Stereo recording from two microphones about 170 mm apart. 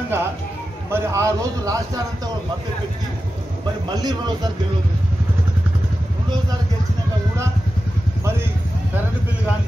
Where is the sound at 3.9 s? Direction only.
25° right (ahead or behind).